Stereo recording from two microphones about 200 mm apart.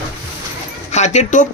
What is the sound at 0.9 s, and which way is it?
Speech, 35° left (ahead or behind).